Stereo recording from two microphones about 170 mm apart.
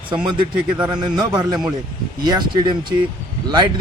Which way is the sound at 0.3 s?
25° right (ahead or behind).